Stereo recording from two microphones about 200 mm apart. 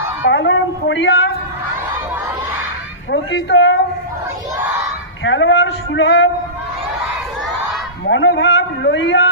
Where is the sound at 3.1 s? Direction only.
65° left (ahead or behind).